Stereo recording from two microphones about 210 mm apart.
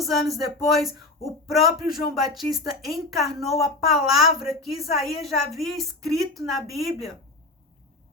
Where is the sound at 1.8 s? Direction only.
45° left (ahead or behind).